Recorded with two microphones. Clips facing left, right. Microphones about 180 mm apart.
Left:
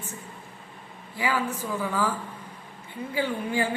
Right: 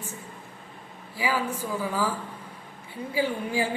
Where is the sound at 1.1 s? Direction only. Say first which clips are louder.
Even; 10° right (ahead or behind).